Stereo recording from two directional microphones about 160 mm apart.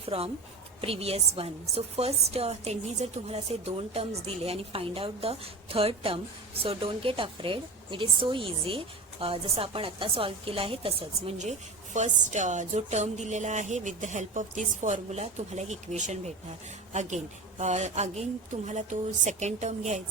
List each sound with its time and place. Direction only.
0.0 s a woman's voice: 35° right (ahead or behind)